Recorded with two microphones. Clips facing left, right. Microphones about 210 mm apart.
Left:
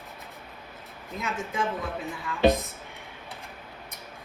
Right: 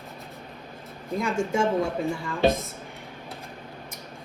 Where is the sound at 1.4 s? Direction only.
50° right (ahead or behind).